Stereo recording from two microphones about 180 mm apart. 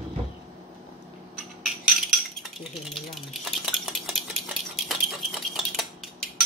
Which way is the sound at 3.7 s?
Centre (ahead or behind).